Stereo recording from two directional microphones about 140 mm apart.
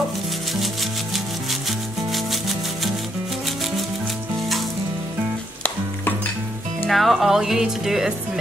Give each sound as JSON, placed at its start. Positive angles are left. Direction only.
{"t": 1.1, "sound": "rub", "side_deg": 0}
{"t": 6.9, "sound": "speech", "side_deg": 0}